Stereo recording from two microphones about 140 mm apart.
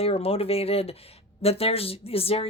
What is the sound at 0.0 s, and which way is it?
A woman's voice, 45° left (ahead or behind).